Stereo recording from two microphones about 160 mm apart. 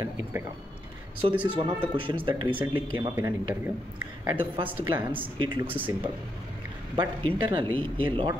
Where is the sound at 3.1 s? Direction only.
10° right (ahead or behind).